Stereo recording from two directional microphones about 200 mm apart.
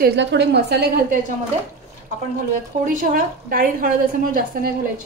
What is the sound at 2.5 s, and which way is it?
A woman's voice, 40° right (ahead or behind).